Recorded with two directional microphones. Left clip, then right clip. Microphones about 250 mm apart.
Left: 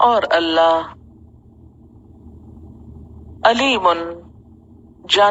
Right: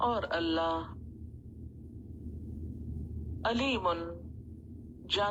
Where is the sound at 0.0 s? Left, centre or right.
Left.